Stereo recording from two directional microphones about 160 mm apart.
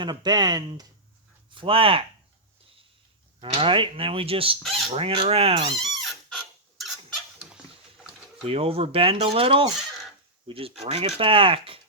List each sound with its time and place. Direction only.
0.0 s speech: 25° right (ahead or behind)
3.4 s speech: 30° right (ahead or behind)
5.8 s a sound: centre (ahead or behind)
8.4 s speech: 35° right (ahead or behind)